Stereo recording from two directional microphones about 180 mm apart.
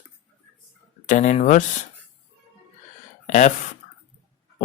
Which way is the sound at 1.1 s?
40° left (ahead or behind).